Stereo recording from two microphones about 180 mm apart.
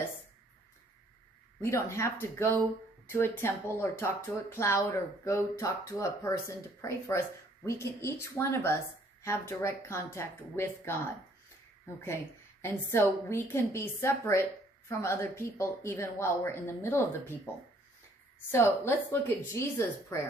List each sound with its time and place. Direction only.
1.6 s speech: 15° left (ahead or behind)
12.6 s speech: 15° left (ahead or behind)
18.5 s speech: 15° left (ahead or behind)